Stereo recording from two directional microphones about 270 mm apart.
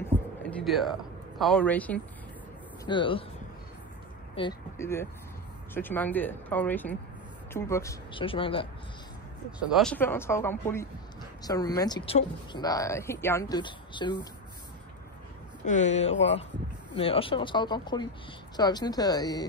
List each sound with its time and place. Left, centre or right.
0.0 s a sound: centre
1.4 s speech: centre
2.8 s speech: centre
4.4 s speech: centre
9.6 s speech: centre
15.6 s speech: left